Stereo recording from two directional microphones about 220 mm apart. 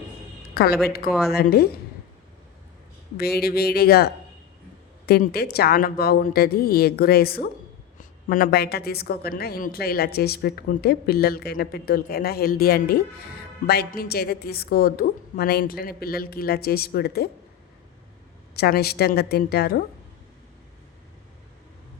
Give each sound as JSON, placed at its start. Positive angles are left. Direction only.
{"t": 0.5, "sound": "a woman's voice", "side_deg": 45}
{"t": 3.2, "sound": "a woman's voice", "side_deg": 45}
{"t": 18.5, "sound": "a woman's voice", "side_deg": 45}